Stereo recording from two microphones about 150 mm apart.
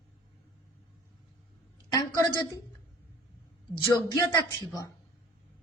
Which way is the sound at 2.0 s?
25° left (ahead or behind).